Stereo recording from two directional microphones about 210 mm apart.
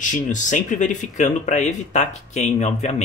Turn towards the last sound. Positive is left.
turn(degrees=35)  # may be behind; listen again after turning